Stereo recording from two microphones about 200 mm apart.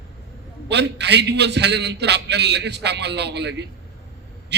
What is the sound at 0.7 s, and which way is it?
A man's voice, 60° right (ahead or behind).